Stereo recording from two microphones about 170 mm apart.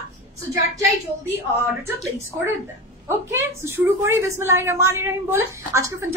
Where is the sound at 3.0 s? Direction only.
15° right (ahead or behind).